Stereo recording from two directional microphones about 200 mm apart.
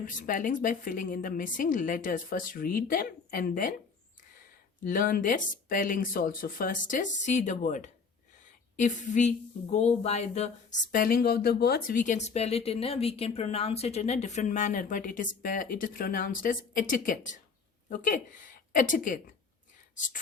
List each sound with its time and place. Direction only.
0.0 s a woman's voice: 40° left (ahead or behind)
4.8 s a woman's voice: 45° left (ahead or behind)